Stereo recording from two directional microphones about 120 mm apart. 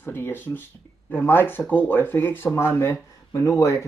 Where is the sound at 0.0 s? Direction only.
15° left (ahead or behind).